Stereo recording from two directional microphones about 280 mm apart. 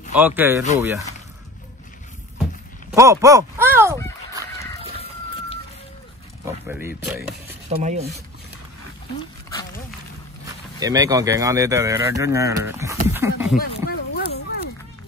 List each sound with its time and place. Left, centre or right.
0.1 s speech: centre
2.9 s speech: centre
4.9 s chicken: left
6.4 s speech: centre
7.7 s rub: right
10.4 s speech: centre
13.6 s a sound: left